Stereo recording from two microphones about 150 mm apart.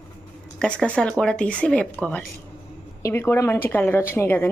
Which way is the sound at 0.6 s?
5° left (ahead or behind).